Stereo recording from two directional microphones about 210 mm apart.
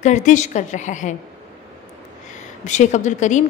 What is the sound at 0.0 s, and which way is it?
A woman's voice, 35° left (ahead or behind).